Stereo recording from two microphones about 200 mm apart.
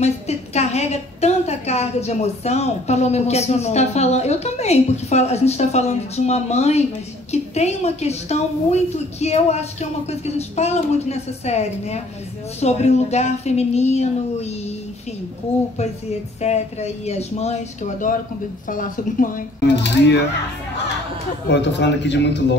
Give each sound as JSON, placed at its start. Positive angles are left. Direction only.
{"t": 0.0, "sound": "a woman's voice", "side_deg": 35}
{"t": 16.3, "sound": "a woman's voice", "side_deg": 35}
{"t": 19.6, "sound": "a man's voice", "side_deg": 60}
{"t": 21.5, "sound": "a man's voice", "side_deg": 60}